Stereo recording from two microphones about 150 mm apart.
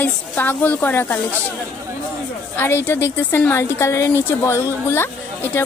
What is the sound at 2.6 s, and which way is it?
A woman's voice, 15° left (ahead or behind).